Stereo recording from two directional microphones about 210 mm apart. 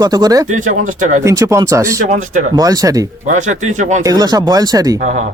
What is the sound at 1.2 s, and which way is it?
Speech, 15° right (ahead or behind).